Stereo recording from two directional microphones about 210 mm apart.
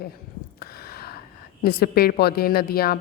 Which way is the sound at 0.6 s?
45° left (ahead or behind).